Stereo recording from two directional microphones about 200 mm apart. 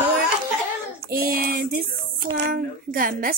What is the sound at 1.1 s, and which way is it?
A woman's voice, 50° right (ahead or behind).